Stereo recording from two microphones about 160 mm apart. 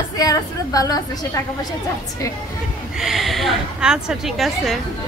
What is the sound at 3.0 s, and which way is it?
Speech, centre (ahead or behind).